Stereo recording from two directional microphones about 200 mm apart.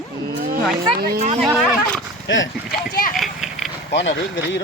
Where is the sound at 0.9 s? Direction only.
50° right (ahead or behind).